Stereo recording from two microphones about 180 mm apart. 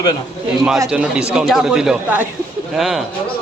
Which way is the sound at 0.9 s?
5° right (ahead or behind).